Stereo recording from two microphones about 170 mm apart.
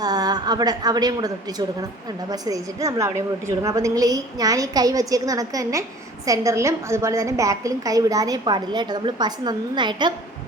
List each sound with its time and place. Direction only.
0.0 s a woman's voice: 25° right (ahead or behind)